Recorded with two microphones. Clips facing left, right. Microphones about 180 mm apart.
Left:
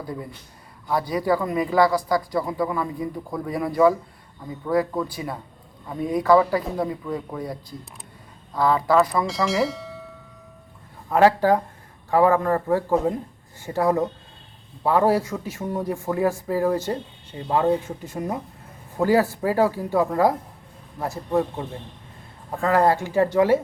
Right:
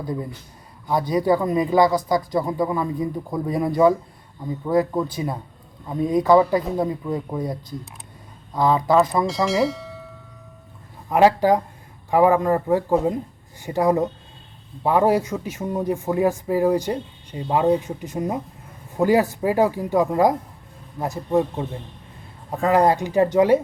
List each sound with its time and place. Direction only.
0.9 s speech: 20° right (ahead or behind)
9.2 s speech: centre (ahead or behind)
11.1 s speech: 15° right (ahead or behind)